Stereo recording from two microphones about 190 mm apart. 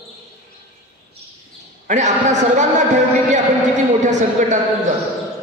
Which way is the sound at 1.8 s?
40° right (ahead or behind).